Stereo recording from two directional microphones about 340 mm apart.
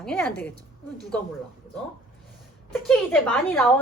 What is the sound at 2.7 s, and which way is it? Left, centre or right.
A woman's voice, centre.